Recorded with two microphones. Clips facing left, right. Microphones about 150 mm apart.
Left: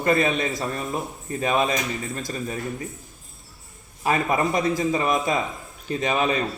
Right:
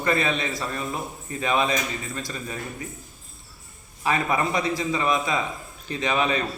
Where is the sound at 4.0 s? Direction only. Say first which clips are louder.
Left 2 dB; 45° left (ahead or behind).